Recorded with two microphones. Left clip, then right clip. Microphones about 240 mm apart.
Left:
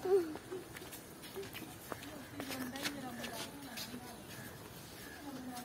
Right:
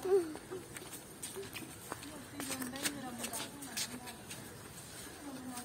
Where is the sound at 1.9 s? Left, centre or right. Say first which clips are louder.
Even; right.